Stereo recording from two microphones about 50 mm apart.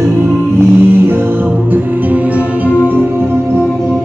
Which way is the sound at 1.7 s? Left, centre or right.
Right.